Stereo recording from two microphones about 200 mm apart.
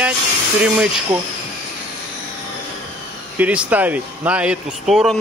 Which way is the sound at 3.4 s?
5° right (ahead or behind).